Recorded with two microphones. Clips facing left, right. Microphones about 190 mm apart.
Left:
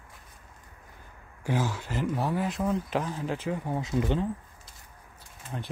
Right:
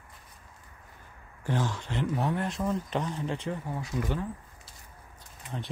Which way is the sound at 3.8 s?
20° left (ahead or behind).